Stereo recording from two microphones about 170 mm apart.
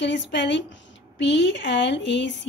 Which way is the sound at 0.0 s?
90° left.